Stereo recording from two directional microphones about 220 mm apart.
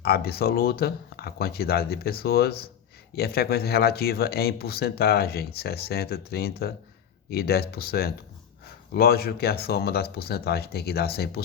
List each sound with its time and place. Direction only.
0.0 s speech: 45° left (ahead or behind)